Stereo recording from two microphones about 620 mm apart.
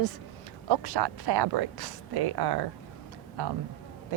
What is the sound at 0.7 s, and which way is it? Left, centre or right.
Speech, right.